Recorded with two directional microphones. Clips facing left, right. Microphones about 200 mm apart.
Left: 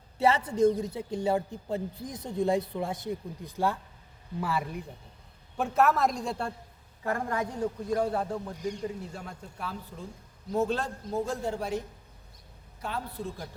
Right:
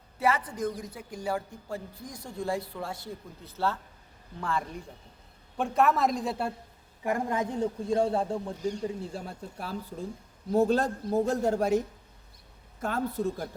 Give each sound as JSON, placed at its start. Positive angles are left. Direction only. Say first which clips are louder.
{"t": 0.2, "sound": "a woman's voice", "louder": "left 5 dB", "side_deg": 30}
{"t": 7.0, "sound": "a man's voice", "louder": "right 2 dB", "side_deg": -15}
{"t": 12.8, "sound": "a woman's voice", "louder": "right 6 dB", "side_deg": -45}